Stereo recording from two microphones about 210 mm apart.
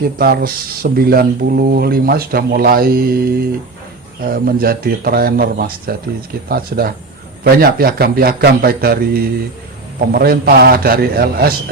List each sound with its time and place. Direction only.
0.0 s a man's voice: 45° right (ahead or behind)